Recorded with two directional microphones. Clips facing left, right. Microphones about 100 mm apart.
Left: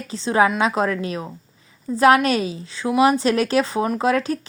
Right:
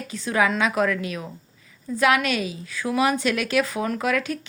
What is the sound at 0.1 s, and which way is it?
A woman's voice, 30° left (ahead or behind).